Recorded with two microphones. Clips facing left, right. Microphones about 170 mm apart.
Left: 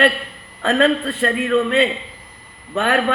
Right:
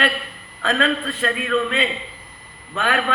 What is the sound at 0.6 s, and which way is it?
Speech, 60° left (ahead or behind).